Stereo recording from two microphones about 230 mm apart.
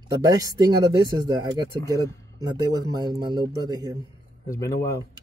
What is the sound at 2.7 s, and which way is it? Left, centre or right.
Speech, centre.